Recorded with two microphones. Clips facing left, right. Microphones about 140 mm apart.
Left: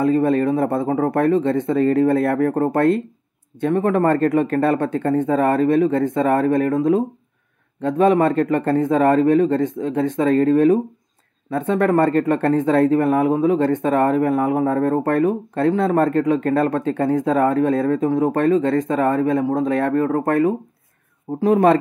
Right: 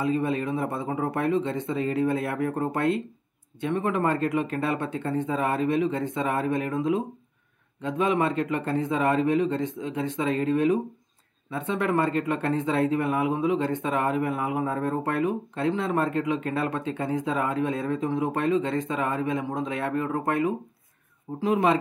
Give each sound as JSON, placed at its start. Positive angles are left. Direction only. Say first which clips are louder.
{"t": 0.0, "sound": "speech", "louder": "left 9 dB", "side_deg": 45}